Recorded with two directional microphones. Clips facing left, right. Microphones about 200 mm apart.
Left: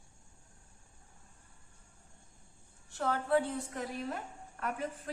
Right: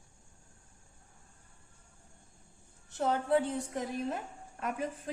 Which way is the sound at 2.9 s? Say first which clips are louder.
Right 2 dB; 20° right (ahead or behind).